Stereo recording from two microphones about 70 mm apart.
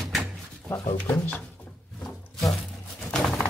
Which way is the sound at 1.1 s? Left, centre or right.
Left.